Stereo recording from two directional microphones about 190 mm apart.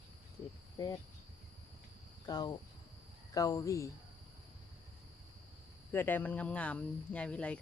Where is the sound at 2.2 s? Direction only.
20° left (ahead or behind).